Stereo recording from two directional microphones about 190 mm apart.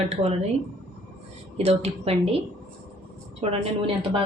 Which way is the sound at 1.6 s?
35° right (ahead or behind).